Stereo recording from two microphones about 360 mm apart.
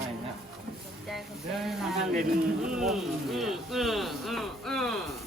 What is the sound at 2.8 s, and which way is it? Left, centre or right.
Speech, centre.